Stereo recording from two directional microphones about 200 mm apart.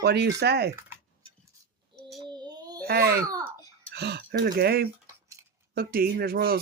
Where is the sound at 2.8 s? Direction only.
50° right (ahead or behind).